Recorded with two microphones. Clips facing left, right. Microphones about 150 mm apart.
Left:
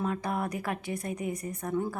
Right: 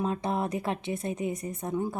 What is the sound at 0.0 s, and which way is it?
A woman's voice, 25° right (ahead or behind).